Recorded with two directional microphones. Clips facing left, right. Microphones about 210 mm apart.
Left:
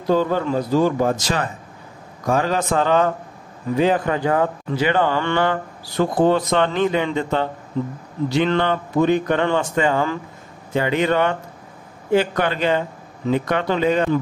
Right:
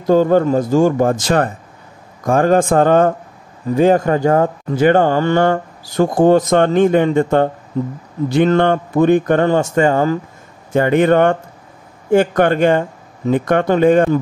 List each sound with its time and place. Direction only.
0.0 s speech: 45° right (ahead or behind)